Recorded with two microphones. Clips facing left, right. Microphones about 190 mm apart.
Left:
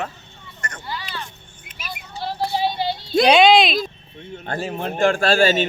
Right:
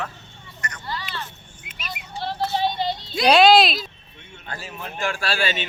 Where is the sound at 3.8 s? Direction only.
40° left (ahead or behind).